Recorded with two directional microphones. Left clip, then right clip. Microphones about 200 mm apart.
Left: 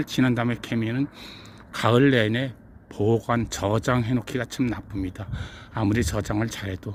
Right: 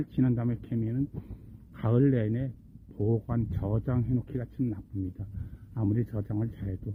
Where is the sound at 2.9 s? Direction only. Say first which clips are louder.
Left 8 dB; 45° left (ahead or behind).